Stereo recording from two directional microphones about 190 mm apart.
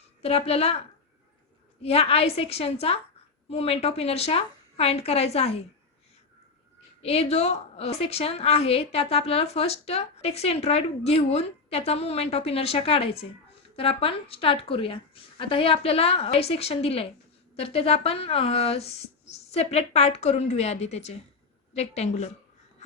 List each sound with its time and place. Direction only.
0.2 s a woman's voice: 30° left (ahead or behind)
1.8 s a woman's voice: 30° left (ahead or behind)
7.0 s a woman's voice: 30° left (ahead or behind)